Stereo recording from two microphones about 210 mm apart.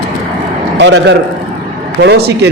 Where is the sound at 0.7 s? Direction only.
55° right (ahead or behind).